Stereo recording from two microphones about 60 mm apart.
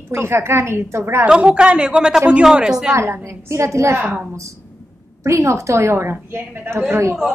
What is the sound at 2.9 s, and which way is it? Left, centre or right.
A woman's voice, right.